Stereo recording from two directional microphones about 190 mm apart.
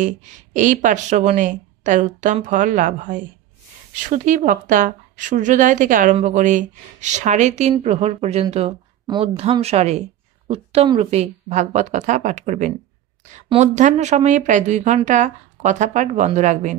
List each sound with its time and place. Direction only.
0.0 s speech: 40° right (ahead or behind)
9.0 s speech: 25° right (ahead or behind); by 16.7 s 40° right (ahead or behind)